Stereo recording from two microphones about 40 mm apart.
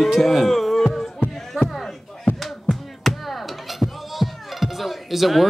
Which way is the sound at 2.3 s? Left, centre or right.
Left.